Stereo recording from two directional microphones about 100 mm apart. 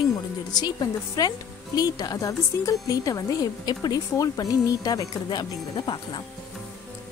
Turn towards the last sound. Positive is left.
turn(degrees=50)  # may be behind; listen again after turning